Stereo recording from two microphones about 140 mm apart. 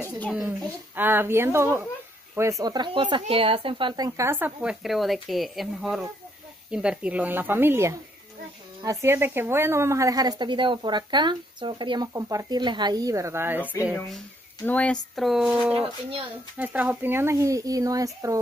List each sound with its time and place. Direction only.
0.5 s a woman's voice: 15° right (ahead or behind)
4.3 s a woman's voice: 10° right (ahead or behind); by 12.1 s 35° right (ahead or behind)
12.1 s a woman's voice: 25° right (ahead or behind)
14.7 s a woman's voice: 10° left (ahead or behind); by 18.4 s 25° right (ahead or behind)